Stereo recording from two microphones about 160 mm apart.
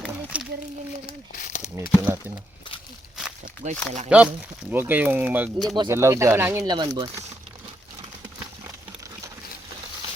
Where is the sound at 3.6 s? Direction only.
45° right (ahead or behind).